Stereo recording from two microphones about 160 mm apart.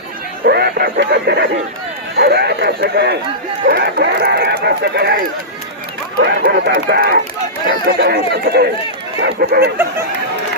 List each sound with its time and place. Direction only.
0.4 s speech: 75° right (ahead or behind)